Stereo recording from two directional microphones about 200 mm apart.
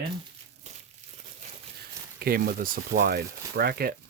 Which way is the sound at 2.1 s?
50° right (ahead or behind).